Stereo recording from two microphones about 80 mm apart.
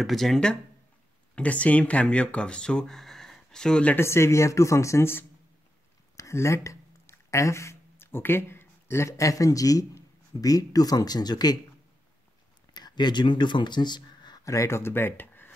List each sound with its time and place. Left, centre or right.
0.0 s speech: centre
3.9 s speech: left
12.7 s speech: left
14.4 s speech: left